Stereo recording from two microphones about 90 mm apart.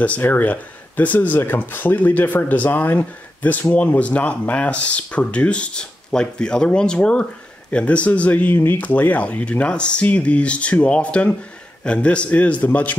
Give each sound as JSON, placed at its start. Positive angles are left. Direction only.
{"t": 0.0, "sound": "speech", "side_deg": 20}